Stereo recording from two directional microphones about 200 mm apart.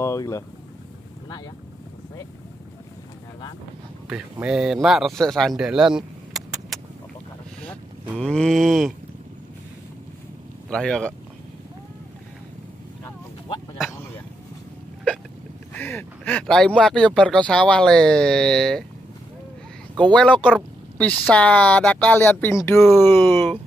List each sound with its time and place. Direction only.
0.0 s vehicle: 15° left (ahead or behind)
4.1 s speech: 5° right (ahead or behind)
8.2 s speech: 5° left (ahead or behind)
10.7 s speech: 5° left (ahead or behind)
15.7 s speech: 10° left (ahead or behind)
20.1 s speech: 5° left (ahead or behind)